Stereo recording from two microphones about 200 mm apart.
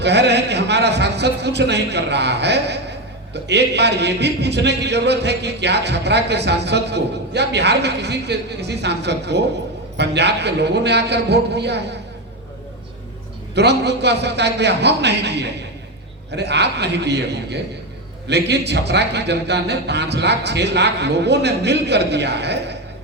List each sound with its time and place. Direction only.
0.0 s a man's voice: 60° right (ahead or behind)
13.6 s a man's voice: 55° right (ahead or behind)